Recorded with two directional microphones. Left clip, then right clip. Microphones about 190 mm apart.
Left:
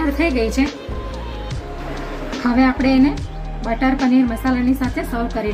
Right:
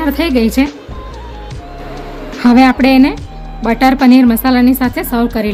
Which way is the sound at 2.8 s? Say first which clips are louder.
Right 7 dB; 65° right (ahead or behind).